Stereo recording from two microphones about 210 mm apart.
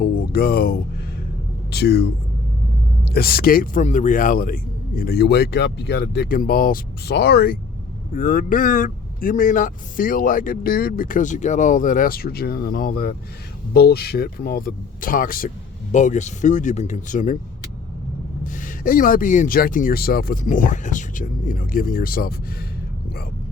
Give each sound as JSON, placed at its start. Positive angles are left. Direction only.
{"t": 0.0, "sound": "a sound", "side_deg": 45}
{"t": 1.7, "sound": "speech", "side_deg": 50}
{"t": 18.4, "sound": "speech", "side_deg": 40}